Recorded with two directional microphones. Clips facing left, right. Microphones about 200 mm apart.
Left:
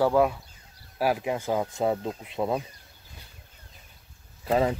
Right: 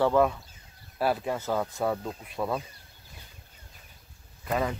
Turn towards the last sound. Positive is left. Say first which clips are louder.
# left 5 dB
turn(degrees=30)  # may be behind; listen again after turning